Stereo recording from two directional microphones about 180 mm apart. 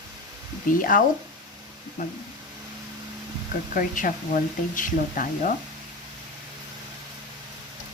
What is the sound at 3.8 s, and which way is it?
Speech, 50° left (ahead or behind).